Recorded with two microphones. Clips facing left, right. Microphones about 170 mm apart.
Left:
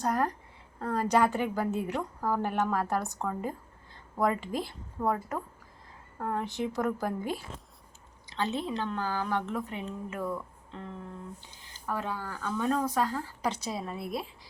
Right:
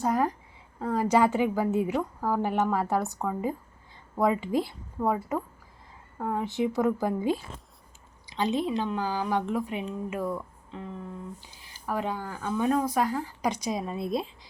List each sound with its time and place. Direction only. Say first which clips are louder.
0.0 s a woman's voice: right 3 dB; 10° right (ahead or behind)
0.8 s a sound: right 3 dB; 10° right (ahead or behind)
1.1 s speech: right 3 dB; 15° right (ahead or behind)
6.6 s speech: right 7 dB; 20° right (ahead or behind)